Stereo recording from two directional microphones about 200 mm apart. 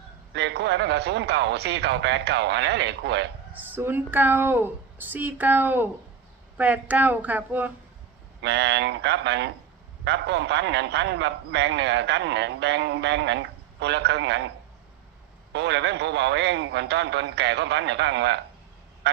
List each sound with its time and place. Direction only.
0.3 s a man's voice: 60° right (ahead or behind)
3.5 s a woman's voice: 10° right (ahead or behind)
8.4 s a man's voice: 60° right (ahead or behind)
15.5 s a man's voice: 60° right (ahead or behind)
19.0 s goose: 55° right (ahead or behind)